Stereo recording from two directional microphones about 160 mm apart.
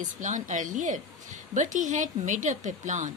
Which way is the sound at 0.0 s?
50° right (ahead or behind).